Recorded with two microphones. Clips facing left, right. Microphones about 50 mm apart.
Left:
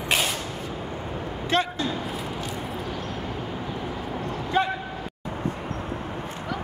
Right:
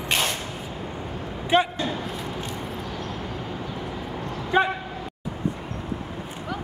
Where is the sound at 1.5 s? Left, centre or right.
Centre.